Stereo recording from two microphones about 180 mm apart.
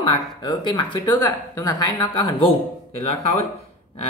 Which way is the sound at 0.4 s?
25° left (ahead or behind).